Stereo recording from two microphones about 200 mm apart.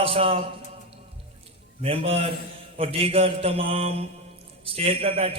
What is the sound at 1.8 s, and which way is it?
A man's voice, 30° right (ahead or behind).